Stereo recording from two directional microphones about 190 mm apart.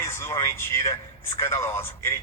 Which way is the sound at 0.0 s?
15° left (ahead or behind).